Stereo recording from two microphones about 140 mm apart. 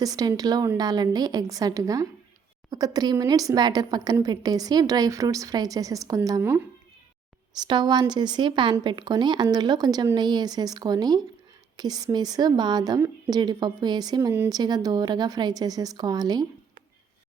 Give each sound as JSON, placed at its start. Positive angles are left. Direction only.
{"t": 0.0, "sound": "speech", "side_deg": -25}
{"t": 7.6, "sound": "speech", "side_deg": -30}
{"t": 14.5, "sound": "speech", "side_deg": -30}